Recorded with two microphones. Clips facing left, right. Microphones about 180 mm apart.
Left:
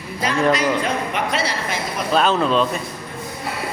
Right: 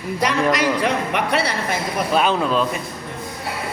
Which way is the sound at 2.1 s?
10° right (ahead or behind).